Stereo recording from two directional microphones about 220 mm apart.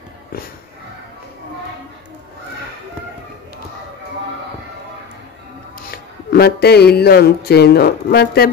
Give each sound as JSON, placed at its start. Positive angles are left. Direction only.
{"t": 5.9, "sound": "speech", "side_deg": 45}